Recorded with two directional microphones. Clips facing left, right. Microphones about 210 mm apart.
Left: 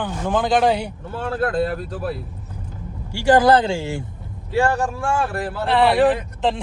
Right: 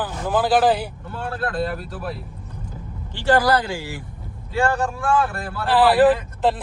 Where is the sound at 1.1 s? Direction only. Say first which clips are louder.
Left 5 dB; 40° left (ahead or behind).